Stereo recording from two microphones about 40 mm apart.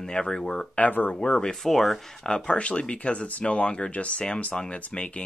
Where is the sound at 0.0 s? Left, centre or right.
Centre.